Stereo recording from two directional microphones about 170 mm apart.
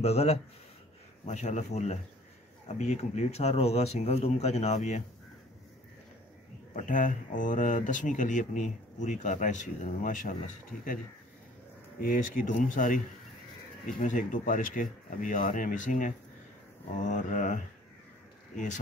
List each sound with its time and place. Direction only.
0.0 s speech: 40° left (ahead or behind)
6.7 s speech: 50° left (ahead or behind)
12.0 s speech: 55° left (ahead or behind)